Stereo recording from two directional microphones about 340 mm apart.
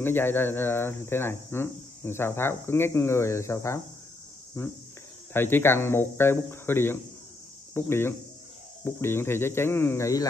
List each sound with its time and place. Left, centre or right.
0.0 s speech: centre
5.3 s speech: centre
7.7 s cricket: centre
8.8 s speech: centre